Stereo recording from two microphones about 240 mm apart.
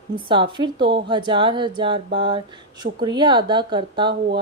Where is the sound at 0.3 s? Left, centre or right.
Centre.